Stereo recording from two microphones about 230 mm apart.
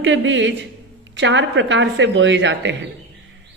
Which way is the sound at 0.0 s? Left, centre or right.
Right.